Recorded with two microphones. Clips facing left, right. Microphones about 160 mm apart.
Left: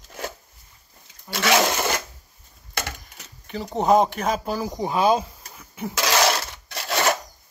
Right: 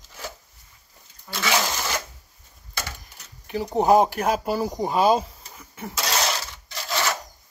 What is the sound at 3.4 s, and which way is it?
Speech, 10° right (ahead or behind).